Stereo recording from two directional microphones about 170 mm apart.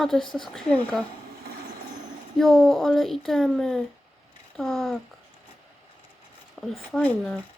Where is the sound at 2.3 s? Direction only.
Centre (ahead or behind).